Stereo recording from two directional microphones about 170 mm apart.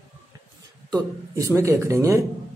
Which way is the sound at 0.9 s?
20° right (ahead or behind).